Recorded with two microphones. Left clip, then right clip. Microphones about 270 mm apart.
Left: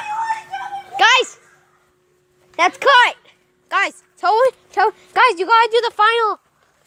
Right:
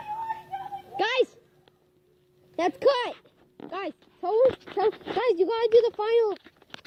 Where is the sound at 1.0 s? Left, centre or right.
Centre.